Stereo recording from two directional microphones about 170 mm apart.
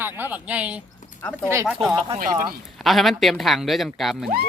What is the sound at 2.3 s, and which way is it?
Speech, 60° right (ahead or behind).